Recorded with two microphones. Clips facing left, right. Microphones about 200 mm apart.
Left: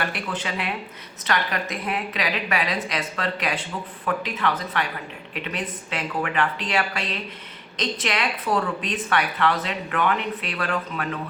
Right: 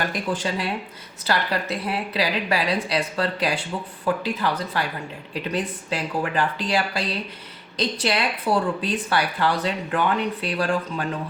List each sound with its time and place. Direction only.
0.0 s speech: 35° right (ahead or behind)